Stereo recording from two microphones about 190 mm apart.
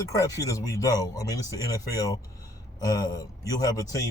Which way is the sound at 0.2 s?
15° left (ahead or behind).